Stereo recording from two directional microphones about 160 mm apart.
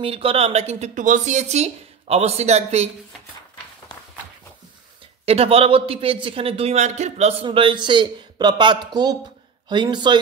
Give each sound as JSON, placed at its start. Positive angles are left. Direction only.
{"t": 0.0, "sound": "speech", "side_deg": -35}
{"t": 5.2, "sound": "speech", "side_deg": -40}
{"t": 7.4, "sound": "speech", "side_deg": -30}